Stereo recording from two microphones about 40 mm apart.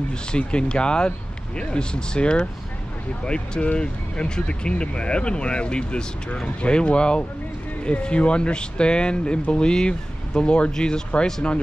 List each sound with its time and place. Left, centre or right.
0.3 s speech: left